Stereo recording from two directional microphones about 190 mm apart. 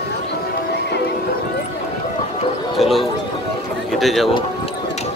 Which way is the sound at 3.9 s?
Centre (ahead or behind).